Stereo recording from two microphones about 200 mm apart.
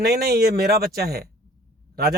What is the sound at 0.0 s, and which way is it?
A man's voice, 50° right (ahead or behind).